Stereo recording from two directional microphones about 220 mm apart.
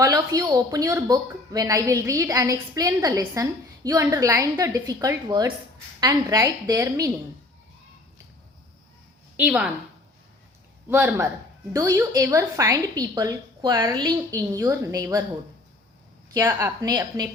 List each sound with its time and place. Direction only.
0.0 s speech: 15° right (ahead or behind)
9.4 s a woman's voice: 5° right (ahead or behind)
10.8 s speech: 10° right (ahead or behind)
16.3 s speech: 10° right (ahead or behind)